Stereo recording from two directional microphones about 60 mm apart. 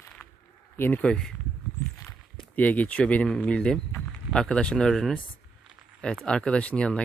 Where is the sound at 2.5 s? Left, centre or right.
Left; by 5.1 s centre.